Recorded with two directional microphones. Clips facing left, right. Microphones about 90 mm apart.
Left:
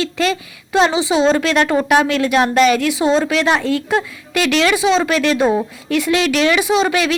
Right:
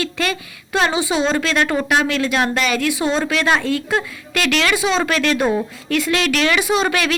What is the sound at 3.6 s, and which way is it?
Speech, 35° left (ahead or behind).